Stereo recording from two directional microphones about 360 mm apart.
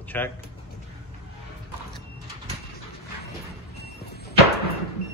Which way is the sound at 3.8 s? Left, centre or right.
Left.